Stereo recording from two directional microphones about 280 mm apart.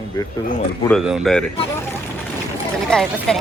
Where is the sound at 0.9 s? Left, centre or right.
Centre.